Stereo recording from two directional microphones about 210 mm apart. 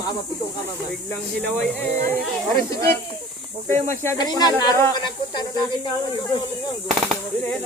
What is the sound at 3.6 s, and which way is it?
Speech, 10° left (ahead or behind).